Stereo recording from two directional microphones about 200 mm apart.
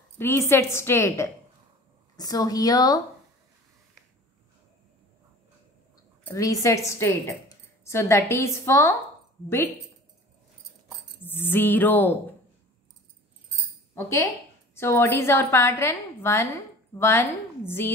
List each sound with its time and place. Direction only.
0.2 s a woman's voice: 10° left (ahead or behind)
6.3 s a woman's voice: 15° left (ahead or behind)
11.1 s a woman's voice: 10° left (ahead or behind)
13.9 s a woman's voice: 15° left (ahead or behind)